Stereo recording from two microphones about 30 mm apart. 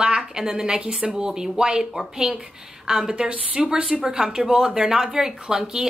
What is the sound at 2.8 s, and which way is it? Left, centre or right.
Speech, right.